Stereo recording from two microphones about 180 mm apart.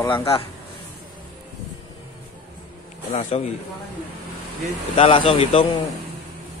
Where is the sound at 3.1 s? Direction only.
40° left (ahead or behind).